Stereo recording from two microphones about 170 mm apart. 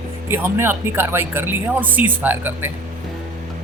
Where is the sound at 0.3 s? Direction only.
15° right (ahead or behind).